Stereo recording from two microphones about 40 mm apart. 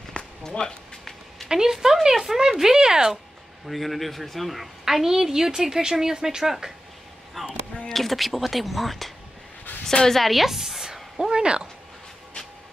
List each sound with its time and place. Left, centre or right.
0.1 s a sound: centre
1.5 s a woman's voice: centre
3.6 s a woman's voice: centre
7.4 s speech: centre; by 11.6 s right